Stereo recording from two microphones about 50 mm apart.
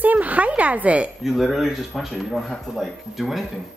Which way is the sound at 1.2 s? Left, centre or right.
Centre.